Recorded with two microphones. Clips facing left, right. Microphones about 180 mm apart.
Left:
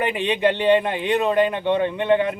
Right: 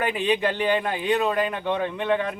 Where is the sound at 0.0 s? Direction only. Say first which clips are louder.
Left 3 dB; centre (ahead or behind).